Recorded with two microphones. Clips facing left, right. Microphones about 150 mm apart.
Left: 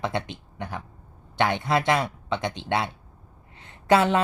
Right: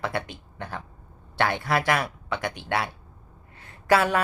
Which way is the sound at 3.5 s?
20° left (ahead or behind).